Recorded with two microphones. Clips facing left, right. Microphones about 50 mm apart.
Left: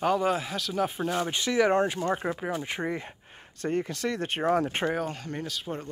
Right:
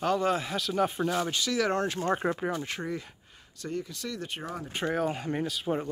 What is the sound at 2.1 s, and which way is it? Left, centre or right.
Speech, centre.